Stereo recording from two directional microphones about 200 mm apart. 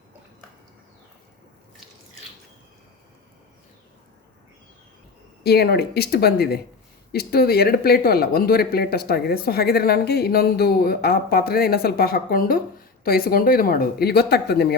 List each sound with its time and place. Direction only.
5.4 s speech: 50° left (ahead or behind)